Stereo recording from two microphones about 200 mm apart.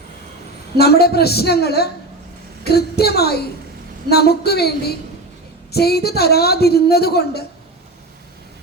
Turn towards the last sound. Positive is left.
turn(degrees=50)  # may be behind; listen again after turning